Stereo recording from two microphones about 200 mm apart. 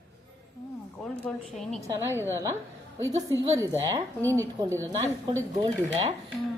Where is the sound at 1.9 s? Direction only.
10° right (ahead or behind).